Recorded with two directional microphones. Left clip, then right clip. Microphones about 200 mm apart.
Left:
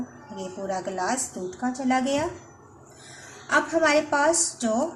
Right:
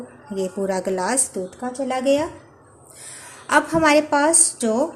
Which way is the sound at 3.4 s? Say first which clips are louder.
Right 5 dB; 45° right (ahead or behind).